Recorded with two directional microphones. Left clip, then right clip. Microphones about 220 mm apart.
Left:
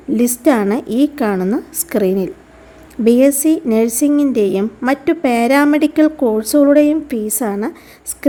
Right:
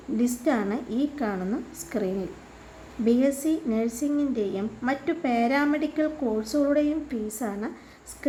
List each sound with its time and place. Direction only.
0.2 s a woman's voice: 45° left (ahead or behind)